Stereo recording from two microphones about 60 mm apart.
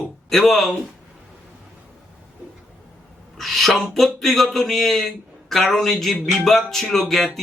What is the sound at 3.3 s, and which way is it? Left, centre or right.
A man's voice, centre.